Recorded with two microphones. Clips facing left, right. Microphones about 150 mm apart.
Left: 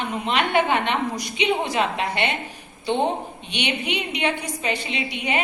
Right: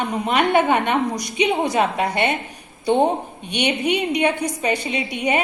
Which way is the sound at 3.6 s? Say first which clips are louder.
Right 6 dB; 45° right (ahead or behind).